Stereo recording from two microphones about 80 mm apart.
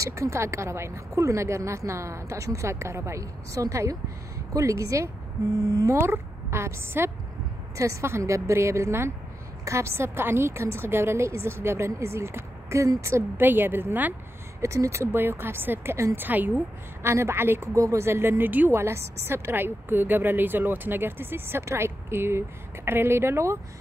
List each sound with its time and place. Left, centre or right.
0.0 s speech: right
5.9 s a woman's voice: right
14.6 s speech: right
16.2 s a woman's voice: right